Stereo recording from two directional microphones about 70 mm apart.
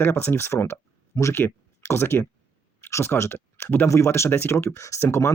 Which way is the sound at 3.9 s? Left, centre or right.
Left.